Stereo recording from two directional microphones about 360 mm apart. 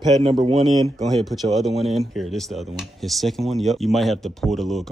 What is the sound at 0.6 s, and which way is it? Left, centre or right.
Speech, centre.